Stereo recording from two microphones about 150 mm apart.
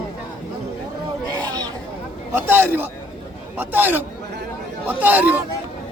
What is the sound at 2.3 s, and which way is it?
Speech, 15° right (ahead or behind).